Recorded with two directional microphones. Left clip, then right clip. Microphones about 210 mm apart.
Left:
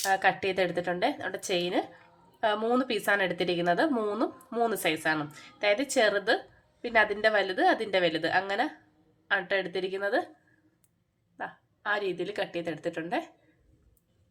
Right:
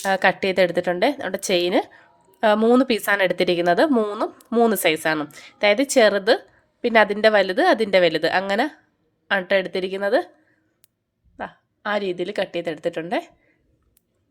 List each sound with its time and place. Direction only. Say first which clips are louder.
0.0 s a woman's voice: right 7 dB; 50° right (ahead or behind)
11.3 s a woman's voice: right 5 dB; 40° right (ahead or behind)